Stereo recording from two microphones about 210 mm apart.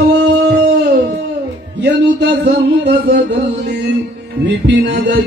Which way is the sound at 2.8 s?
50° right (ahead or behind).